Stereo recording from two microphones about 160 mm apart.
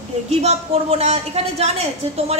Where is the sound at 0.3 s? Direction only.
40° right (ahead or behind).